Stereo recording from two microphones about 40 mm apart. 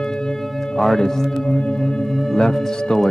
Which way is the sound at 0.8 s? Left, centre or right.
Centre.